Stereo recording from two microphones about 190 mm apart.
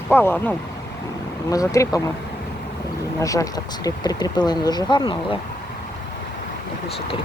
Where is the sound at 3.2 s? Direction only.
15° left (ahead or behind).